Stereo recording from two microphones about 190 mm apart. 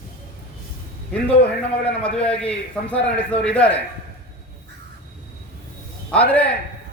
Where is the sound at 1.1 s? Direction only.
5° left (ahead or behind).